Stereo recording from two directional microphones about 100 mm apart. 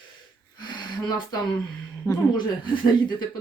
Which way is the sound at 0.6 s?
50° left (ahead or behind).